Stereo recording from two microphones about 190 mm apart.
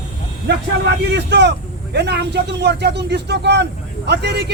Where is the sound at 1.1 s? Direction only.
65° right (ahead or behind).